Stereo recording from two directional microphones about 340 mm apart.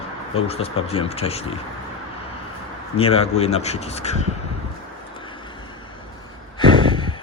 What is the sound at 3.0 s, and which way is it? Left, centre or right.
Speech, centre.